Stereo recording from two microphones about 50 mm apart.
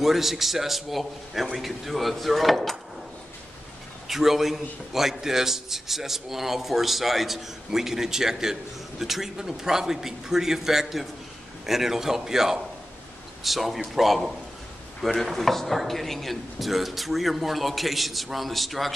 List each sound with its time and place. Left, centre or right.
0.0 s a man's voice: centre
4.1 s a man's voice: centre